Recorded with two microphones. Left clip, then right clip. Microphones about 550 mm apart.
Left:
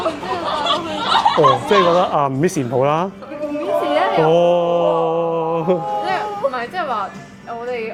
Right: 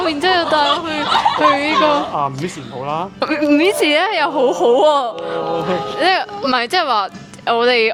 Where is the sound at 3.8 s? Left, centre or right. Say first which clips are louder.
Right 1 dB; right.